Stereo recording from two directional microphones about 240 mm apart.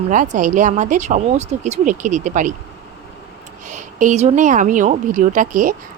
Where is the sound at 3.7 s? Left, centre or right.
Right.